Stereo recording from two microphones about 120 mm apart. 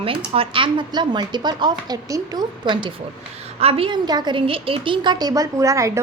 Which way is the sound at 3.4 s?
55° right (ahead or behind).